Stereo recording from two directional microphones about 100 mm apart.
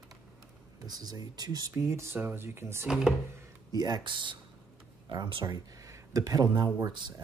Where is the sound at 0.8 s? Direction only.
40° right (ahead or behind).